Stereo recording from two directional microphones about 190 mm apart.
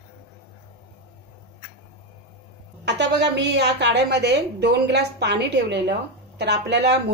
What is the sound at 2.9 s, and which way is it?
Speech, 65° right (ahead or behind).